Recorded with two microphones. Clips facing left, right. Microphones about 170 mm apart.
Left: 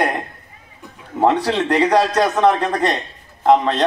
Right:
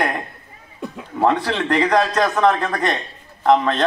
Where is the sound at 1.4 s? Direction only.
15° left (ahead or behind).